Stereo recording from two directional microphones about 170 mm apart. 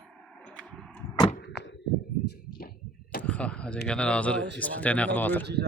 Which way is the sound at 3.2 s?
5° left (ahead or behind).